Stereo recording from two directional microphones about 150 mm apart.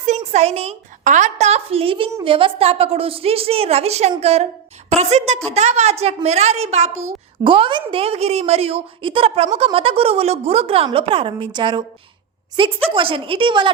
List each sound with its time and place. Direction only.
0.0 s a woman's voice: 50° right (ahead or behind)
7.4 s a woman's voice: 35° right (ahead or behind)